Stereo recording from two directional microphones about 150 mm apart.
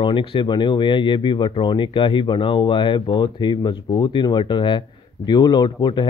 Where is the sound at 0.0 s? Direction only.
35° left (ahead or behind).